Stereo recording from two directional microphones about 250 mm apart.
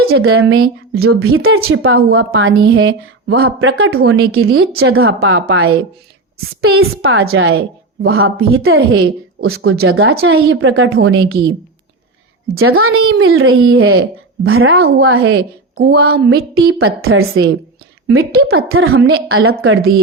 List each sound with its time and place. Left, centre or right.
0.1 s a woman's voice: right
12.5 s a woman's voice: right
16.0 s a woman's voice: right